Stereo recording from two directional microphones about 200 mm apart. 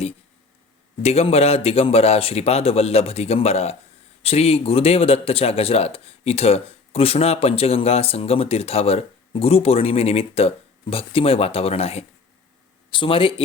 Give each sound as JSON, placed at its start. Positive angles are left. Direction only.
{"t": 1.0, "sound": "speech", "side_deg": 30}